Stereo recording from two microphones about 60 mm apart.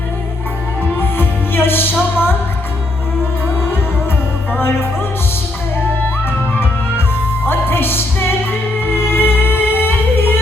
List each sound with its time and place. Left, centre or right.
0.9 s music: left
7.4 s music: left